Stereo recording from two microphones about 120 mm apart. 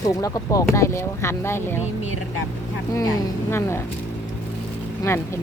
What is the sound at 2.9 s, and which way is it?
Speech, 25° left (ahead or behind).